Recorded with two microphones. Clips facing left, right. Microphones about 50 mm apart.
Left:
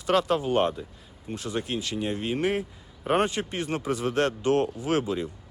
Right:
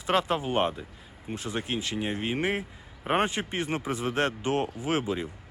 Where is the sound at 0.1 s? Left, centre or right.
Right.